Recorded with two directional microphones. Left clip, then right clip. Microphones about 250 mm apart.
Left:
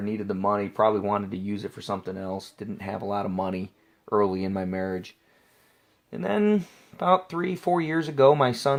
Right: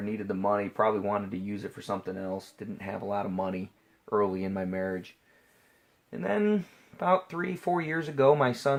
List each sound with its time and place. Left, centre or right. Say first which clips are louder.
0.0 s speech: left 3 dB; left